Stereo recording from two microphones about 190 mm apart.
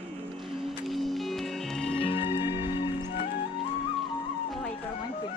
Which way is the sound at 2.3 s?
15° right (ahead or behind).